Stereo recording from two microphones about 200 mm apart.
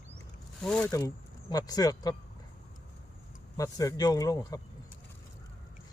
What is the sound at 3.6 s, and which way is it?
Speech, 15° left (ahead or behind).